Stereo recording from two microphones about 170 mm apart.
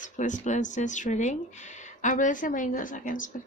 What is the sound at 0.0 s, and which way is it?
Speech, 45° left (ahead or behind).